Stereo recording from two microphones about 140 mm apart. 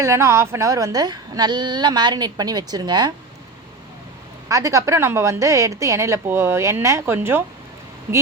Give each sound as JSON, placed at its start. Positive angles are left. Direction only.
{"t": 0.0, "sound": "a woman's voice", "side_deg": -20}
{"t": 4.4, "sound": "a woman's voice", "side_deg": -25}